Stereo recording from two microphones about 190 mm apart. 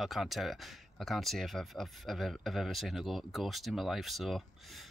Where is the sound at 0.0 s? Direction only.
Centre (ahead or behind).